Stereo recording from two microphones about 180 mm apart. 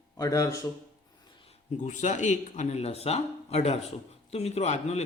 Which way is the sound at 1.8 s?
40° left (ahead or behind).